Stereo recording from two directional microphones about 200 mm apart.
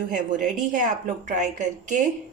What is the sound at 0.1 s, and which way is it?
A woman's voice, 40° right (ahead or behind).